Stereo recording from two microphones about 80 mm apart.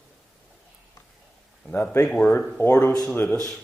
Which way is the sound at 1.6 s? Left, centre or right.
Centre.